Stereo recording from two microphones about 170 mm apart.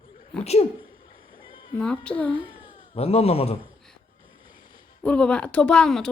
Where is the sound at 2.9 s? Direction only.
35° left (ahead or behind).